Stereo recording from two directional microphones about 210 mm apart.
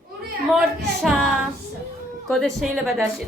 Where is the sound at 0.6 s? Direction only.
Centre (ahead or behind).